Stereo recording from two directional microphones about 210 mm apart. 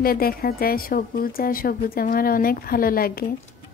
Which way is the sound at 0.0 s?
45° left (ahead or behind).